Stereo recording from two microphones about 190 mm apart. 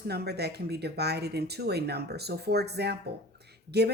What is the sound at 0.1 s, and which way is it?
Speech, 60° right (ahead or behind).